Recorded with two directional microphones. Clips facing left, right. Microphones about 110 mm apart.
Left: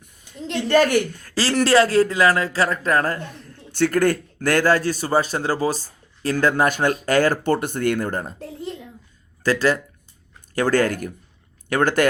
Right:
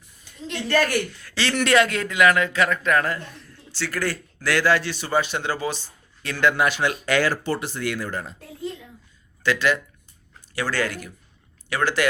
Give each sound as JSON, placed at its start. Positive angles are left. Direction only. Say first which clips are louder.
{"t": 0.7, "sound": "a woman's voice", "louder": "left 5 dB", "side_deg": 20}
{"t": 1.1, "sound": "a man's voice", "louder": "left 4 dB", "side_deg": 45}
{"t": 9.4, "sound": "speech", "louder": "left 3 dB", "side_deg": 40}